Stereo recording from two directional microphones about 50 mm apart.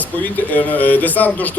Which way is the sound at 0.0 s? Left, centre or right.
Left.